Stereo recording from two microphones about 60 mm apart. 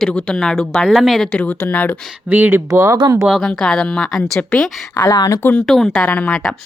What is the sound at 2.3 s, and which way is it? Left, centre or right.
Speech, right.